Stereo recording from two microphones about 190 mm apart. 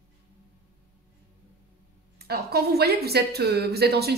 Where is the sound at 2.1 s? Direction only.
55° right (ahead or behind).